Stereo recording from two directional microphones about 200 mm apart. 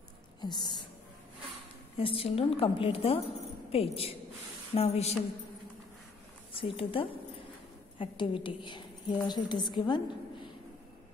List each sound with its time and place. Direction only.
0.4 s speech: 20° left (ahead or behind)
2.0 s a woman's voice: 25° left (ahead or behind)
4.7 s a sound: 30° left (ahead or behind)
6.5 s a woman's voice: 25° left (ahead or behind)